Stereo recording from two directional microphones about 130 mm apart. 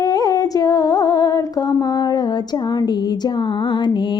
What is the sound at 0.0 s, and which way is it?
Music, 30° left (ahead or behind).